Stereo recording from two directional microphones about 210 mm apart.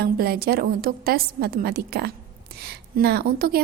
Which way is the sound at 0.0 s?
45° right (ahead or behind).